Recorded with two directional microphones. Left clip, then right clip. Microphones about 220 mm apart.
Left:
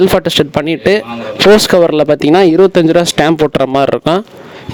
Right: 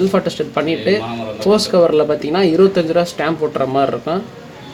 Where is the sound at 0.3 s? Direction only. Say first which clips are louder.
Left 6 dB; 50° left (ahead or behind).